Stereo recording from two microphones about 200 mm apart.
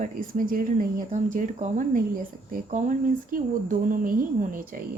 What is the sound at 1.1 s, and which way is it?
Speech, 40° right (ahead or behind).